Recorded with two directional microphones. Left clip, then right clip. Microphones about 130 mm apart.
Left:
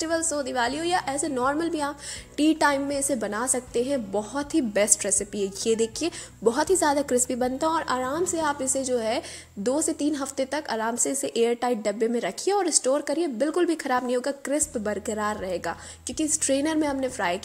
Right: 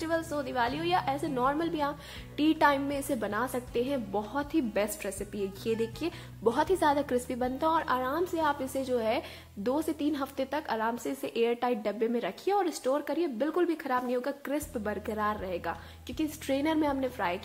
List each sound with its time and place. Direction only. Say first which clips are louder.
0.0 s a woman's voice: left 5 dB; 30° left (ahead or behind)
6.4 s a woman's voice: left 4 dB; 25° left (ahead or behind)
13.7 s a woman's voice: left 5 dB; 40° left (ahead or behind); by 17.1 s 20° left (ahead or behind)